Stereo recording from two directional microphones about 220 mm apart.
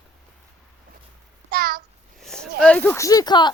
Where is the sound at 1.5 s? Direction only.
45° right (ahead or behind).